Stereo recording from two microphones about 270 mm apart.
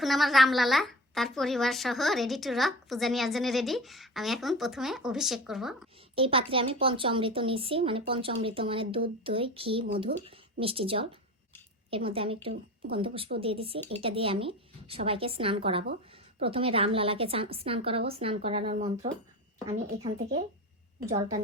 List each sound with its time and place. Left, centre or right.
0.0 s a woman's voice: centre
6.1 s a woman's voice: centre
21.1 s a woman's voice: right